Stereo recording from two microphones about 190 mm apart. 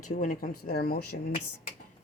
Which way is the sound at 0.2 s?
45° left (ahead or behind).